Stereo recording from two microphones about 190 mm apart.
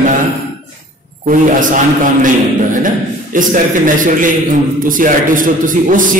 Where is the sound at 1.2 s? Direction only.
45° right (ahead or behind).